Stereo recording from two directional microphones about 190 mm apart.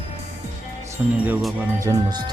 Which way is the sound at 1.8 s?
20° right (ahead or behind).